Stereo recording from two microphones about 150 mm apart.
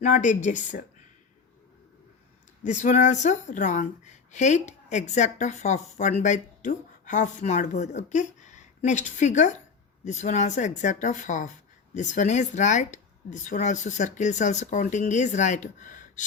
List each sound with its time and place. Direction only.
0.0 s a woman's voice: 55° left (ahead or behind)
2.6 s a woman's voice: 55° left (ahead or behind)